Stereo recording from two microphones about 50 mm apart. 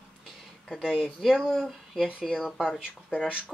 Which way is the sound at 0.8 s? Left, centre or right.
Centre.